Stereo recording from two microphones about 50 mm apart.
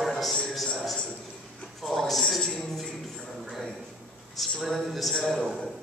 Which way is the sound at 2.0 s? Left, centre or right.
Centre.